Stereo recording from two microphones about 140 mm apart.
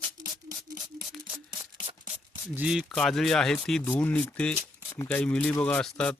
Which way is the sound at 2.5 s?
5° right (ahead or behind).